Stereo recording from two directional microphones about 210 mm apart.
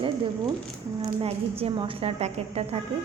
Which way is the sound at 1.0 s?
30° right (ahead or behind).